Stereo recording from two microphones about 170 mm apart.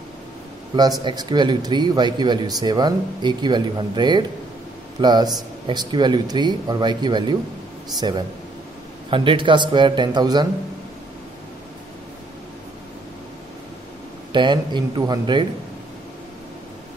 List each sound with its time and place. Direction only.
1.0 s speech: 25° right (ahead or behind)
9.1 s speech: 30° right (ahead or behind)
14.3 s speech: 25° right (ahead or behind)